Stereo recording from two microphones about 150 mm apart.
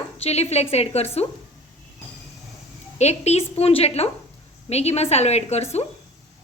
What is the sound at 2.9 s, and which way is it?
A woman's voice, 45° left (ahead or behind).